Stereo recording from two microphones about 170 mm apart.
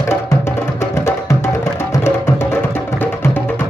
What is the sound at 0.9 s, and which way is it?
Music, 15° left (ahead or behind).